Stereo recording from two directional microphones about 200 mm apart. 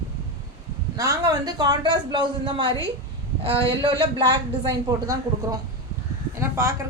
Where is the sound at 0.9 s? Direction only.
20° right (ahead or behind).